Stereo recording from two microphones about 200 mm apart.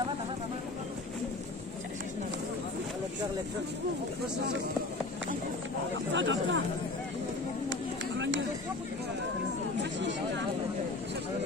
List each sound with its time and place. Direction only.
6.1 s speech: 65° right (ahead or behind)
9.9 s speech: 65° right (ahead or behind)